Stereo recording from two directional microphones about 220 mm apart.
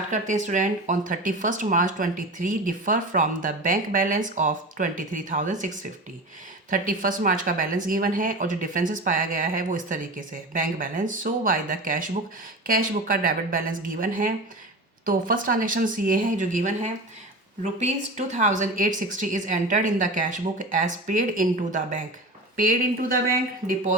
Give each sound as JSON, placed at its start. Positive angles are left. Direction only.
{"t": 0.1, "sound": "speech", "side_deg": -35}